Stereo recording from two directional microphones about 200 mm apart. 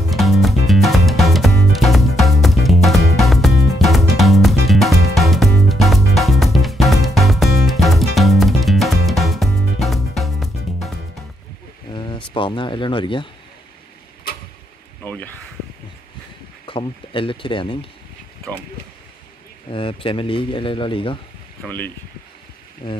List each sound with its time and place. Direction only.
0.1 s music: centre (ahead or behind)
11.9 s a sound: 25° left (ahead or behind)
15.0 s speech: 10° left (ahead or behind)
16.6 s speech: 25° left (ahead or behind)
19.7 s speech: 25° left (ahead or behind)
21.6 s speech: 10° left (ahead or behind)
22.8 s speech: 25° left (ahead or behind)